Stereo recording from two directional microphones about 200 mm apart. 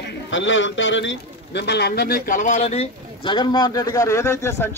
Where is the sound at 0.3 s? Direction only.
70° left (ahead or behind).